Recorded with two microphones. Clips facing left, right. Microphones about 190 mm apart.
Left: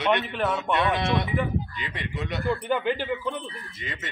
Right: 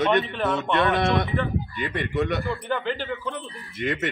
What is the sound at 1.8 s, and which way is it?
Speech, 55° right (ahead or behind).